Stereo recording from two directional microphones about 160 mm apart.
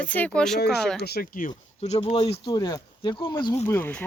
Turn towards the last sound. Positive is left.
turn(degrees=15)  # may be behind; listen again after turning